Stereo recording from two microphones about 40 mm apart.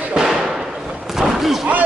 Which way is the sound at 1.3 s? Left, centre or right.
Centre.